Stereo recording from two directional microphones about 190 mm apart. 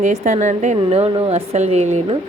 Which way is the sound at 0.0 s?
40° right (ahead or behind).